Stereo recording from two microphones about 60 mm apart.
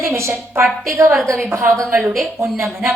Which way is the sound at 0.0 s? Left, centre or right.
Right.